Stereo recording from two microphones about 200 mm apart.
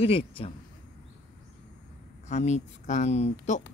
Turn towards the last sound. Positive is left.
turn(degrees=35)  # may be behind; listen again after turning